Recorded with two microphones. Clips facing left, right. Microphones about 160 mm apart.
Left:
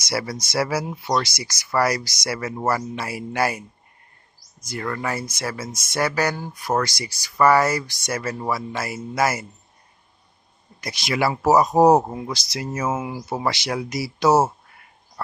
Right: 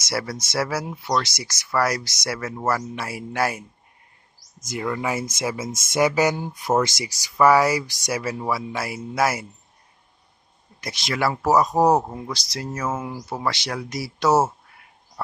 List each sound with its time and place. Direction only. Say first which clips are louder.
0.0 s speech: left 1 dB; centre (ahead or behind)
4.7 s speech: right 1 dB; 10° right (ahead or behind)
7.3 s speech: right 1 dB; 10° right (ahead or behind)
10.8 s speech: left 1 dB; 5° left (ahead or behind)